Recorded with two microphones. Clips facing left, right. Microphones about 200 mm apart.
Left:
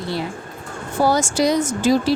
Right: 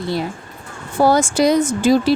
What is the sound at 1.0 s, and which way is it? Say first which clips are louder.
Speech: right 4 dB; 55° right (ahead or behind).